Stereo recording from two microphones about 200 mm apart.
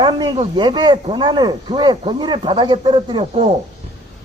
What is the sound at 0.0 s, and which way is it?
A man's voice, 25° right (ahead or behind).